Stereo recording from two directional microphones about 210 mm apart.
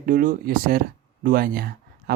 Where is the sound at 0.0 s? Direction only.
40° right (ahead or behind).